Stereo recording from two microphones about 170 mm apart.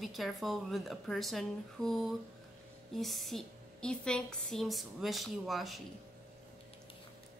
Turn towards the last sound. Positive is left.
turn(degrees=0)  # may be behind; listen again after turning